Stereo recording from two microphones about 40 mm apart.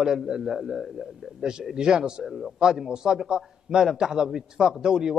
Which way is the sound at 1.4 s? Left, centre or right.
Centre.